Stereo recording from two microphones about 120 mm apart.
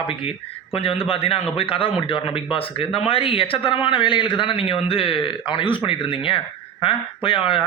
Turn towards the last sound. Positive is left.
turn(degrees=50)  # may be behind; listen again after turning